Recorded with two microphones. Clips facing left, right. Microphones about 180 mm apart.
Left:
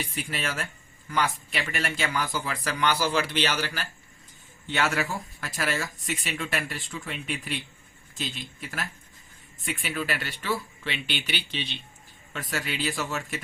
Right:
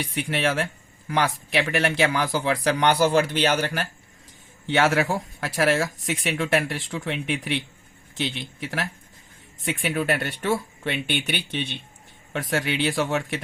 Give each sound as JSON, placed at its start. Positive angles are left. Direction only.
{"t": 0.1, "sound": "speech", "side_deg": -65}
{"t": 2.8, "sound": "speech", "side_deg": -60}
{"t": 4.6, "sound": "speech", "side_deg": -65}
{"t": 9.6, "sound": "speech", "side_deg": -55}